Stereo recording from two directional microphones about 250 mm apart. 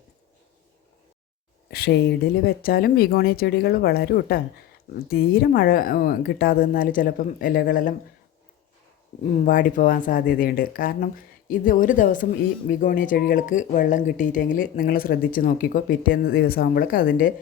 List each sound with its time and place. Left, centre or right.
1.7 s speech: left
9.2 s speech: left